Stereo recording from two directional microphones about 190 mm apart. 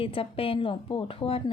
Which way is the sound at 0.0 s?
30° left (ahead or behind).